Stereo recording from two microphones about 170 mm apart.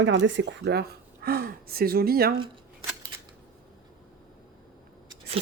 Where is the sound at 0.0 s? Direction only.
90° right; by 2.3 s 60° right (ahead or behind).